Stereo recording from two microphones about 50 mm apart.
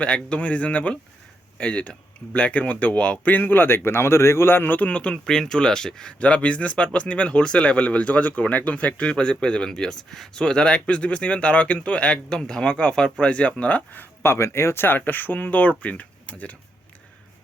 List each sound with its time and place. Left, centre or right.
0.0 s speech: left
4.9 s speech: left
5.1 s speech: centre
6.1 s speech: left
14.2 s speech: left
14.8 s speech: left